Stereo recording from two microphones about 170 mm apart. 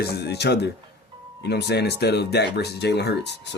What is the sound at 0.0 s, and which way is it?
Speech, 70° left (ahead or behind).